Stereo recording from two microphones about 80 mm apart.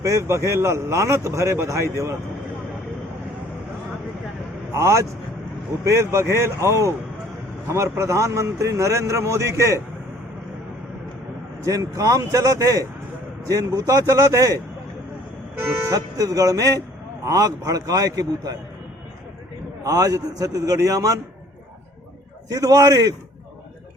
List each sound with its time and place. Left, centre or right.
0.0 s speech: right
4.7 s speech: right
11.6 s a man's voice: right
15.5 s speech: right
15.9 s a man's voice: right
19.8 s a man's voice: right
22.4 s a man's voice: right